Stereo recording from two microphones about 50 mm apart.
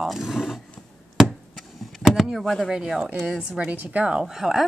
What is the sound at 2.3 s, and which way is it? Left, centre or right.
Speech, centre.